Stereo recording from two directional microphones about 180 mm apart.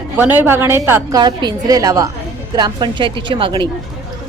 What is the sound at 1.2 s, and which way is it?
A woman's voice, 25° right (ahead or behind).